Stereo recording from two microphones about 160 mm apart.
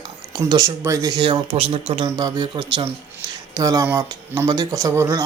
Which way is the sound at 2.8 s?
20° right (ahead or behind).